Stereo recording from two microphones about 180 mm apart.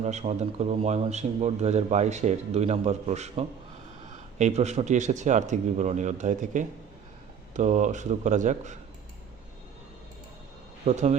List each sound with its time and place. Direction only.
0.0 s speech: 40° right (ahead or behind)
10.8 s speech: 40° right (ahead or behind)